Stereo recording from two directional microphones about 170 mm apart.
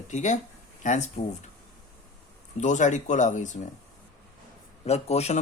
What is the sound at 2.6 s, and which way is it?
Speech, 45° left (ahead or behind).